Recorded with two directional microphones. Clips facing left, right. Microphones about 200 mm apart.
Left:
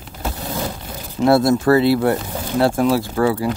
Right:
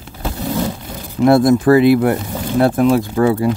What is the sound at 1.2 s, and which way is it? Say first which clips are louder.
Speech: right 3 dB; 20° right (ahead or behind).